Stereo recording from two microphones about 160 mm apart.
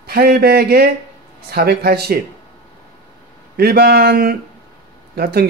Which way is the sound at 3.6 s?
80° right.